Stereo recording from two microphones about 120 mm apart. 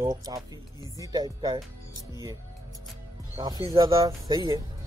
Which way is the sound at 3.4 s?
35° right (ahead or behind).